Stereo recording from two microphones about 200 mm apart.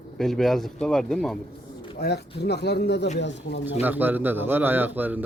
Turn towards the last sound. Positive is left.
turn(degrees=-10)  # may be behind; listen again after turning